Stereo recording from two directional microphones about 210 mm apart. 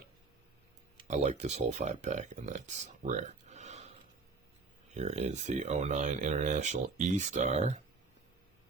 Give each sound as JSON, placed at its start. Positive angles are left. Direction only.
{"t": 1.0, "sound": "speech", "side_deg": -35}
{"t": 4.9, "sound": "speech", "side_deg": -30}